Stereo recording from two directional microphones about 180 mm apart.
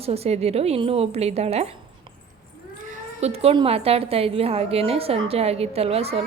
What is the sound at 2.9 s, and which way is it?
A woman's voice, 35° right (ahead or behind).